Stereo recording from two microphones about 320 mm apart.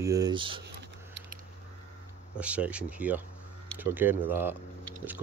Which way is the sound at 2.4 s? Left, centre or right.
Centre.